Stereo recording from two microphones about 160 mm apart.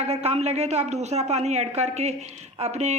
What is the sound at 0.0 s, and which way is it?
A woman's voice, 40° right (ahead or behind).